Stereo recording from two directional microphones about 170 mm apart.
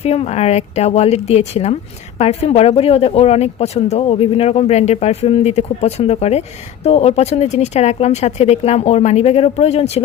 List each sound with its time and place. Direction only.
0.0 s speech: 40° left (ahead or behind)